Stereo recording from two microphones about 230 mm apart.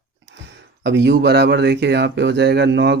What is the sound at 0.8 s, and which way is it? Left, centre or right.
Speech, right.